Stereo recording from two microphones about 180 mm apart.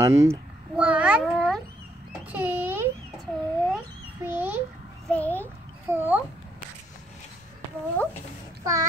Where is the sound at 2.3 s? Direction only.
10° right (ahead or behind).